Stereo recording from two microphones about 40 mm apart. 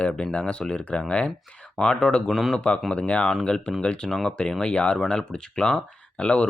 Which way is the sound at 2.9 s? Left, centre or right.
Left.